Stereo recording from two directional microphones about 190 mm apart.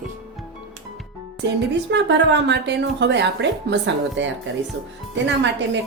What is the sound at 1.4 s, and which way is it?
Speech, 65° right (ahead or behind).